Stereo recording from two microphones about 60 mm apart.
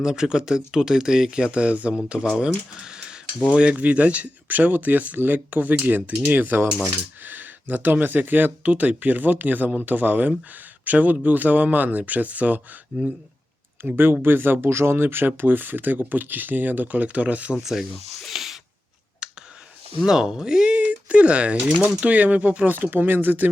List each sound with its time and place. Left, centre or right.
0.0 s speech: centre; by 12.6 s right
13.8 s speech: right
17.6 s speech: centre
19.2 s clicking: centre
20.1 s speech: centre
20.7 s a sound: right
21.8 s speech: right